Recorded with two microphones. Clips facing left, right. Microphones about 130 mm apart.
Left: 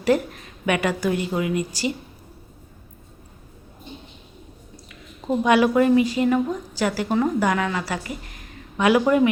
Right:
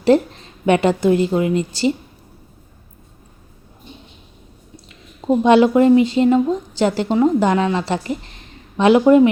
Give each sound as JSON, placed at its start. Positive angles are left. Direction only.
{"t": 0.0, "sound": "a woman's voice", "side_deg": -25}
{"t": 4.9, "sound": "a woman's voice", "side_deg": -25}